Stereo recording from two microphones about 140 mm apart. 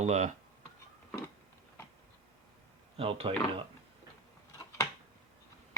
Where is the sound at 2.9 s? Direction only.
45° right (ahead or behind).